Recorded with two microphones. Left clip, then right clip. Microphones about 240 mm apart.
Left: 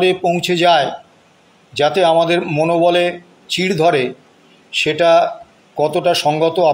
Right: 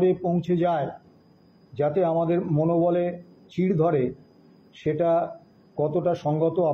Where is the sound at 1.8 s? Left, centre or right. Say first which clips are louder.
Left 10 dB; left.